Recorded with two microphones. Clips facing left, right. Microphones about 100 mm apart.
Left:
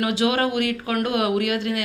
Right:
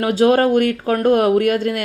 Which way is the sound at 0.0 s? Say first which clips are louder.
Right 7 dB; 40° right (ahead or behind).